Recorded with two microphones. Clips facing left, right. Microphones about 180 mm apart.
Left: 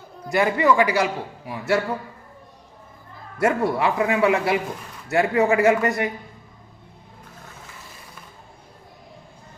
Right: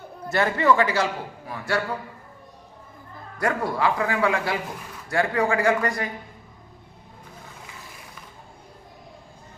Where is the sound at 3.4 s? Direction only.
25° left (ahead or behind).